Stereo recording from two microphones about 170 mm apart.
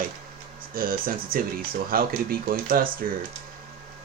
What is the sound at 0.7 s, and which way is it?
Speech, 55° right (ahead or behind).